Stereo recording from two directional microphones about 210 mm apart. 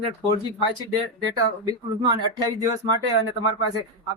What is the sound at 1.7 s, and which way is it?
Speech, 20° right (ahead or behind).